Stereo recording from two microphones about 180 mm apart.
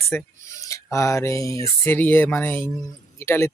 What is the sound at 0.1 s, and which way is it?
Speech, 15° left (ahead or behind).